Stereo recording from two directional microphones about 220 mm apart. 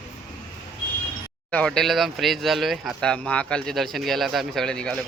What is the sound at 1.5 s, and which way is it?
Speech, 5° left (ahead or behind).